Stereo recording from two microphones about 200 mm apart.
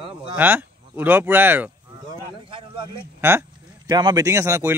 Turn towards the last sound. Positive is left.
turn(degrees=-15)  # may be behind; listen again after turning